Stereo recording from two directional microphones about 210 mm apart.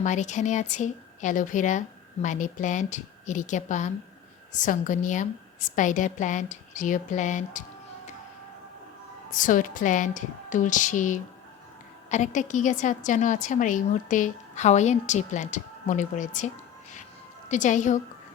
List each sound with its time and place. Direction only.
0.0 s a woman's voice: 35° left (ahead or behind)
9.3 s a woman's voice: 40° left (ahead or behind)
17.5 s a woman's voice: 35° left (ahead or behind)